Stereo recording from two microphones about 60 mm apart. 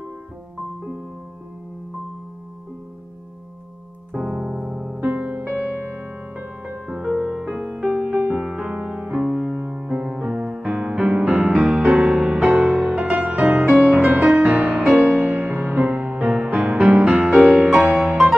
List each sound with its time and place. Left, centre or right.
4.1 s keyboard: centre
5.6 s music: right
6.9 s music: centre
11.7 s music: centre
12.4 s music: centre
15.8 s music: centre